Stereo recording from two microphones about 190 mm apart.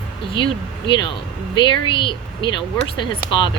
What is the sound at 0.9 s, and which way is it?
A woman's voice, 25° left (ahead or behind).